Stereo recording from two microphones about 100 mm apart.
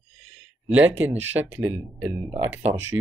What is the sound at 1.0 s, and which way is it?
Speech, 15° right (ahead or behind).